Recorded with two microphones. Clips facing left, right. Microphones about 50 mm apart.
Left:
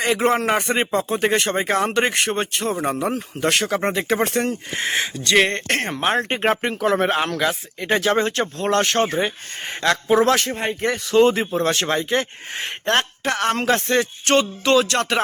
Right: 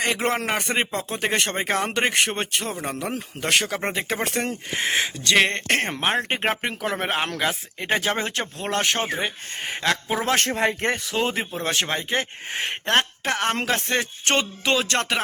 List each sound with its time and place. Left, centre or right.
0.0 s speech: centre
2.8 s speech: centre
3.2 s speech: centre
10.4 s speech: right
11.1 s speech: centre
13.7 s speech: centre
14.0 s speech: right